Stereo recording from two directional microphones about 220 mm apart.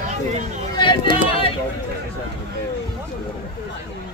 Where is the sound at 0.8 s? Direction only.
20° left (ahead or behind).